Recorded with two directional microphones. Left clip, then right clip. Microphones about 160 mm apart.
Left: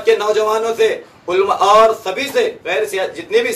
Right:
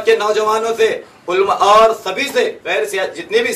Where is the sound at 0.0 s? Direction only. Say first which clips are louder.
Even; 10° left (ahead or behind).